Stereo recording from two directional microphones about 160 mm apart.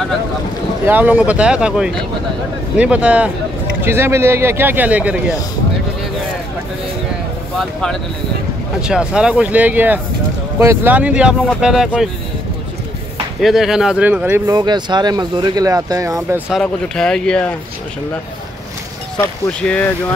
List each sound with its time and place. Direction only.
0.8 s speech: 10° right (ahead or behind)
7.5 s speech: centre (ahead or behind)
13.4 s speech: centre (ahead or behind)
14.5 s speech: 25° right (ahead or behind)
16.4 s speech: centre (ahead or behind)
19.1 s speech: 10° left (ahead or behind)